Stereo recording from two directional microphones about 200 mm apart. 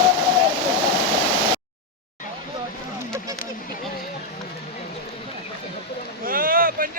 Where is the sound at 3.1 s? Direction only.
15° right (ahead or behind).